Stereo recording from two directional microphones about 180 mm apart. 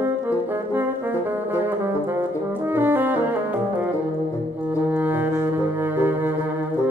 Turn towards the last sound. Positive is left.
turn(degrees=-10)  # may be behind; listen again after turning